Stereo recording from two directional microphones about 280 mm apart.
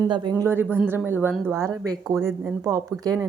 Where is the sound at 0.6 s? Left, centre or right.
Centre.